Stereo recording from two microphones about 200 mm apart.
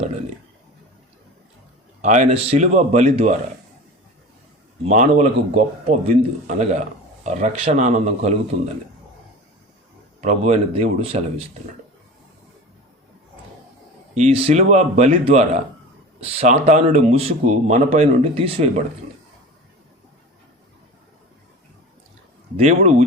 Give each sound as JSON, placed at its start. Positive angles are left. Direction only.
{"t": 2.0, "sound": "speech", "side_deg": -40}
{"t": 4.8, "sound": "speech", "side_deg": -35}
{"t": 10.2, "sound": "speech", "side_deg": -35}
{"t": 14.2, "sound": "speech", "side_deg": -35}
{"t": 22.5, "sound": "speech", "side_deg": -35}